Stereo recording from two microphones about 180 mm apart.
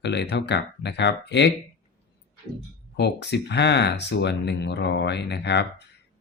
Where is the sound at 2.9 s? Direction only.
70° left (ahead or behind).